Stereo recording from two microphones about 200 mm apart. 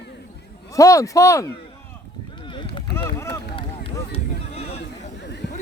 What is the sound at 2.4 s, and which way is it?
Run, 25° left (ahead or behind).